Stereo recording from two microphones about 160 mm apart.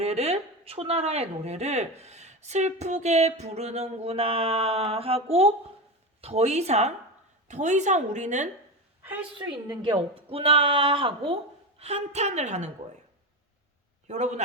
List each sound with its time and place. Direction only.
0.0 s a woman's voice: 40° right (ahead or behind)
9.4 s a woman's voice: 30° right (ahead or behind); by 12.7 s 45° right (ahead or behind)
14.1 s a woman's voice: 45° right (ahead or behind)